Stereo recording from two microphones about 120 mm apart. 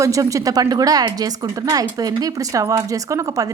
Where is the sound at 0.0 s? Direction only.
25° right (ahead or behind).